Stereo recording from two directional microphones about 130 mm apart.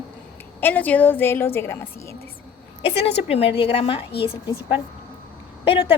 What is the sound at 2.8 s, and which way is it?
A woman's voice, 50° left (ahead or behind).